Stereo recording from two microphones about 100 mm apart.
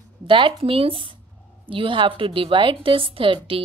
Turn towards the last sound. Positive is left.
turn(degrees=-60)  # may be behind; listen again after turning